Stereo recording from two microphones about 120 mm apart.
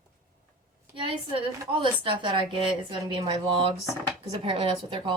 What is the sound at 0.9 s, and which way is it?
Speech, 45° right (ahead or behind).